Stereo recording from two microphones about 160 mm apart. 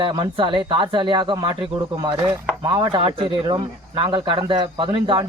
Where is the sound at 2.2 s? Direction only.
15° right (ahead or behind).